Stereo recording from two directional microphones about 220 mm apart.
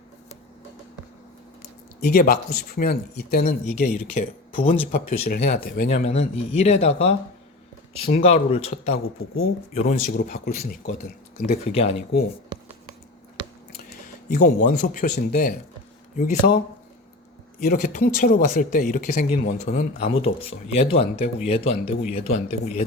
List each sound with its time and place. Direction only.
2.0 s speech: 45° left (ahead or behind)
6.1 s speech: 30° left (ahead or behind)
10.2 s speech: 45° left (ahead or behind)
12.5 s a sound: 20° right (ahead or behind)
14.3 s speech: 40° left (ahead or behind)
17.6 s speech: 40° left (ahead or behind)